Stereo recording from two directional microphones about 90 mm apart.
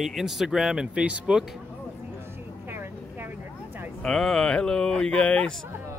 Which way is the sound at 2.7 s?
25° right (ahead or behind).